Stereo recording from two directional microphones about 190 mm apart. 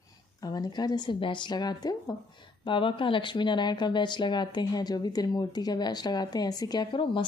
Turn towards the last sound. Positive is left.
turn(degrees=25)  # may be behind; listen again after turning